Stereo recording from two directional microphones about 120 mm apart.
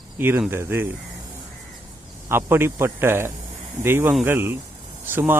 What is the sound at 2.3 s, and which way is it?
Speech, 20° right (ahead or behind).